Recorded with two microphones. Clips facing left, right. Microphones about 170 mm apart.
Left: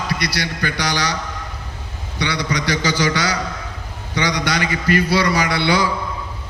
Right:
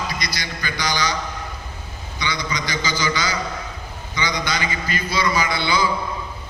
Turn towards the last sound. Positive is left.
turn(degrees=75)  # may be behind; listen again after turning